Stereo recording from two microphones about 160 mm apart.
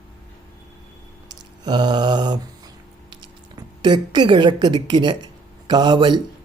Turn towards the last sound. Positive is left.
turn(degrees=-25)  # may be behind; listen again after turning